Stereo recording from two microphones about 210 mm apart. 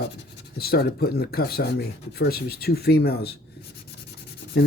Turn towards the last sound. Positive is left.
turn(degrees=55)  # may be behind; listen again after turning